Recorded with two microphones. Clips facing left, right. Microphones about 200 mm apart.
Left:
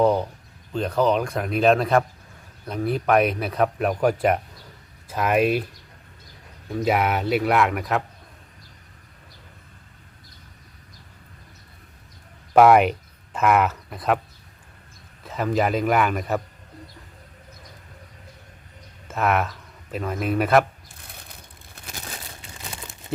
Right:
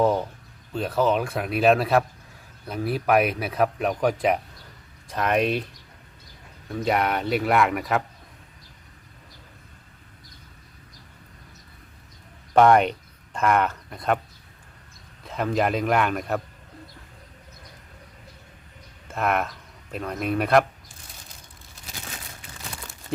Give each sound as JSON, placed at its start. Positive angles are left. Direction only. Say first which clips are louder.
{"t": 0.0, "sound": "speech", "louder": "left 2 dB", "side_deg": -5}
{"t": 12.5, "sound": "speech", "louder": "left 2 dB", "side_deg": 5}
{"t": 15.2, "sound": "speech", "louder": "left 1 dB", "side_deg": 0}
{"t": 19.0, "sound": "speech", "louder": "left 2 dB", "side_deg": 0}
{"t": 21.1, "sound": "vehicle", "louder": "left 5 dB", "side_deg": 60}
{"t": 21.8, "sound": "a sound", "louder": "left 3 dB", "side_deg": 55}
{"t": 22.4, "sound": "crumpling", "louder": "left 1 dB", "side_deg": 20}